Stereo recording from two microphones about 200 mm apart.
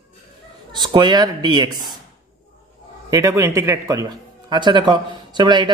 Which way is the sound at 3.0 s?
15° right (ahead or behind).